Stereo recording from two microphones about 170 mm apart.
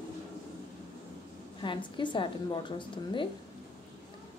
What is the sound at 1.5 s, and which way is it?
A woman's voice, 30° left (ahead or behind).